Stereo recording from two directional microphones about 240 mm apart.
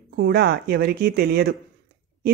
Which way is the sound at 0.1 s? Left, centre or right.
Right.